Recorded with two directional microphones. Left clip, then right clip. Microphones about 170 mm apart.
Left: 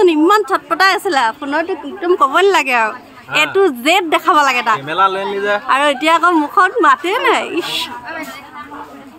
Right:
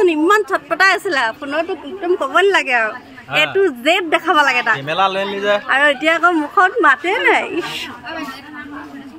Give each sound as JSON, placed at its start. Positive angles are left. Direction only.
{"t": 0.0, "sound": "a woman's voice", "side_deg": 20}
{"t": 4.8, "sound": "a man's voice", "side_deg": -5}
{"t": 5.7, "sound": "a woman's voice", "side_deg": 20}